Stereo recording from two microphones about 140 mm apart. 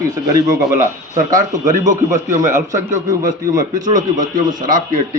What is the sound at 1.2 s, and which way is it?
A man's voice, 70° right (ahead or behind).